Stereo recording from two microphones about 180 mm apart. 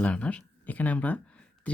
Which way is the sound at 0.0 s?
5° left (ahead or behind).